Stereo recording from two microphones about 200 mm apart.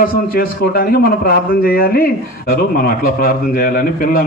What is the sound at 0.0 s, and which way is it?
A man's voice, 50° left (ahead or behind).